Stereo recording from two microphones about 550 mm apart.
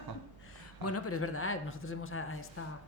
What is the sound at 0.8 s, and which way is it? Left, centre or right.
Speech, left.